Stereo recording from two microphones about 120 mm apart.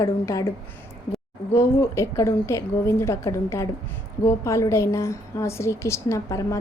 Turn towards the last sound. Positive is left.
turn(degrees=25)  # may be behind; listen again after turning